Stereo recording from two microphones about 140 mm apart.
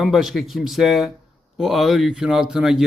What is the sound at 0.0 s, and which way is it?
Speech, centre (ahead or behind).